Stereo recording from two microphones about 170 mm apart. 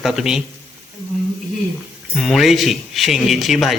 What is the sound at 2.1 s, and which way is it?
A man's voice, centre (ahead or behind).